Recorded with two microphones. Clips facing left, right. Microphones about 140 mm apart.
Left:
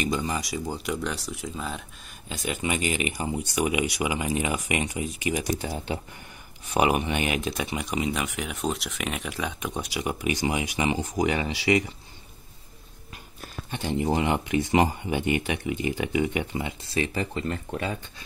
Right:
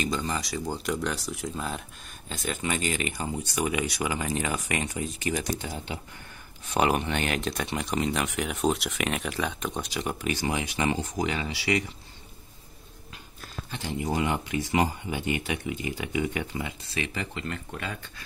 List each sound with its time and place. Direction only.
0.0 s speech: 15° left (ahead or behind)
0.7 s speech: centre (ahead or behind)
2.2 s speech: 15° left (ahead or behind)
6.7 s speech: 10° left (ahead or behind)
13.8 s speech: 25° left (ahead or behind)